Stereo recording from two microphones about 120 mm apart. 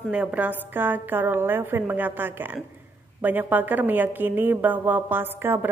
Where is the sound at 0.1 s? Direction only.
10° right (ahead or behind).